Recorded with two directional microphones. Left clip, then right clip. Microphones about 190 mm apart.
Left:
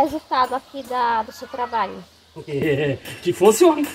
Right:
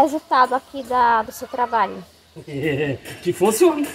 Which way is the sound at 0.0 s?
40° right (ahead or behind).